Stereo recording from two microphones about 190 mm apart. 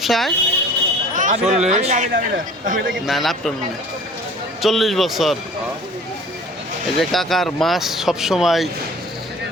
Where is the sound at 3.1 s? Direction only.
Centre (ahead or behind).